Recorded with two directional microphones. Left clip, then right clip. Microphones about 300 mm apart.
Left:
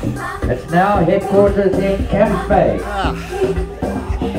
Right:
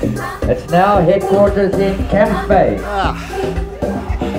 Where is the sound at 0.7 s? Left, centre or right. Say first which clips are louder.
Right 3 dB; right.